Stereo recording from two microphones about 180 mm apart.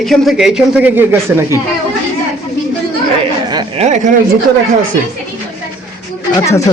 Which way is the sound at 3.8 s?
40° right (ahead or behind).